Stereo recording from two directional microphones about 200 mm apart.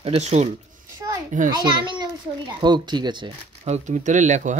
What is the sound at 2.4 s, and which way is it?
Speech, 20° right (ahead or behind).